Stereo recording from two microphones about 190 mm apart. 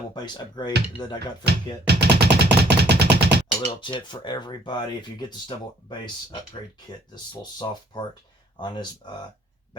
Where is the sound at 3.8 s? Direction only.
25° left (ahead or behind).